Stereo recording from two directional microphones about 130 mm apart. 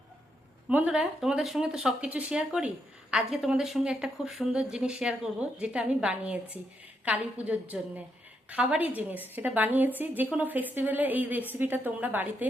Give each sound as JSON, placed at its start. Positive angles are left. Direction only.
{"t": 0.7, "sound": "speech", "side_deg": -10}